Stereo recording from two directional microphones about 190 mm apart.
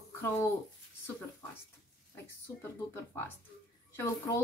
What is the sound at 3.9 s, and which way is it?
Speech, 15° left (ahead or behind).